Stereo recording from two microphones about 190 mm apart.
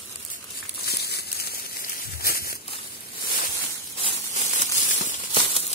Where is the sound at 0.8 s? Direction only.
55° left (ahead or behind).